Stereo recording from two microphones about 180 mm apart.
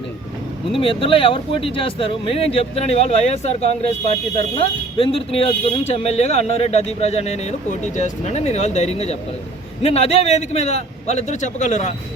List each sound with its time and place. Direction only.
0.8 s speech: 30° left (ahead or behind)